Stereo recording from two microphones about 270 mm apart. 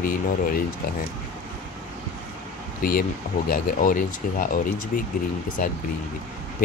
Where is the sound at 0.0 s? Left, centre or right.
Left.